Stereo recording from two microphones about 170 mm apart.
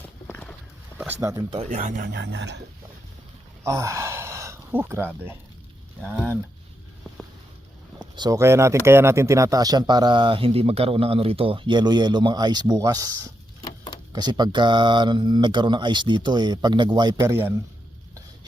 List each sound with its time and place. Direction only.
0.3 s walk: 10° left (ahead or behind)
1.2 s speech: 20° right (ahead or behind)
1.5 s speech: 45° right (ahead or behind)
2.0 s speech: 90° right
3.6 s speech: 15° right (ahead or behind)
8.1 s speech: 25° right (ahead or behind)
13.6 s a sound: 30° left (ahead or behind)
14.1 s speech: 25° right (ahead or behind)